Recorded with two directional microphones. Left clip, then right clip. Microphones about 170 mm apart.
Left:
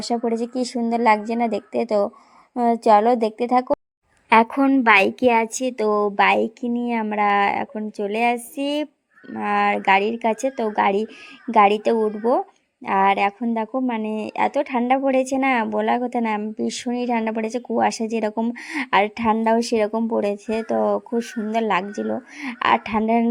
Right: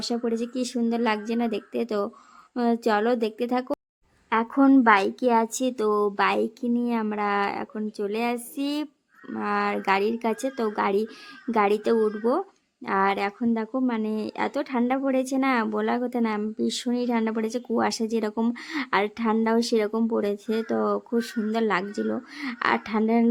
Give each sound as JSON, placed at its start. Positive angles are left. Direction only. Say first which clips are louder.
{"t": 0.3, "sound": "a woman's voice", "louder": "left 4 dB", "side_deg": 15}
{"t": 18.5, "sound": "a woman's voice", "louder": "left 6 dB", "side_deg": 15}
{"t": 19.9, "sound": "speech", "louder": "left 3 dB", "side_deg": -5}
{"t": 20.1, "sound": "a woman's voice", "louder": "left 4 dB", "side_deg": 10}